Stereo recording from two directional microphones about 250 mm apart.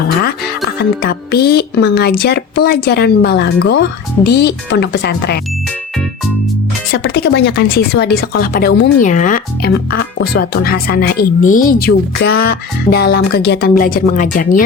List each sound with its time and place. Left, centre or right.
0.2 s speech: left
6.9 s speech: left
12.3 s music: left
13.1 s speech: left